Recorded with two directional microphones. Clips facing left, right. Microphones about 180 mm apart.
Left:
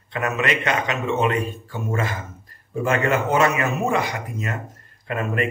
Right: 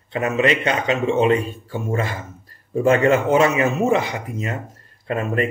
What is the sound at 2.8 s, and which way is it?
A man's voice, 30° right (ahead or behind).